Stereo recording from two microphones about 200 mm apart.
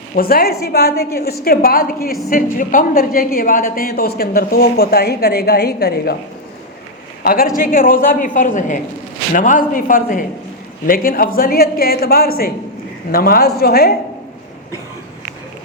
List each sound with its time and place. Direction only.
0.2 s a woman's voice: 45° left (ahead or behind)
7.2 s a woman's voice: 50° left (ahead or behind)